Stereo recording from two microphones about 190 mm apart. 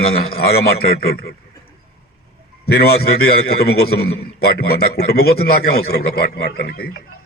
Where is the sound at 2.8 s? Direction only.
55° left (ahead or behind).